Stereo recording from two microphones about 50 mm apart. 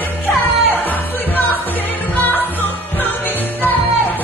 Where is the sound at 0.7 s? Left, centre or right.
Left.